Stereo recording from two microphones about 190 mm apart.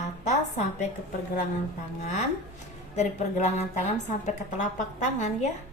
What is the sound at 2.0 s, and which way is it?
A woman's voice, 35° left (ahead or behind).